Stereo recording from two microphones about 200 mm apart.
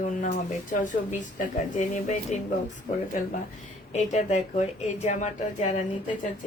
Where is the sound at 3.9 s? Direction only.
35° left (ahead or behind).